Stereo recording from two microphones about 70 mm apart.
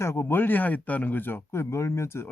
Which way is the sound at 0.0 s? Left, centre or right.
Left.